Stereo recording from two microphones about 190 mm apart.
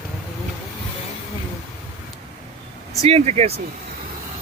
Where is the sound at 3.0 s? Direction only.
35° right (ahead or behind).